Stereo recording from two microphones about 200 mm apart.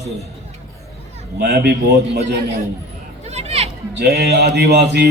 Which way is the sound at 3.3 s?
30° right (ahead or behind).